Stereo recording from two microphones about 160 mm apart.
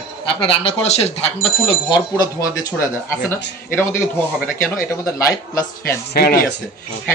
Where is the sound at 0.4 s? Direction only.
35° left (ahead or behind).